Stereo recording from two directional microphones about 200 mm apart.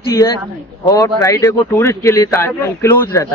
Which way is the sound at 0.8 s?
15° left (ahead or behind).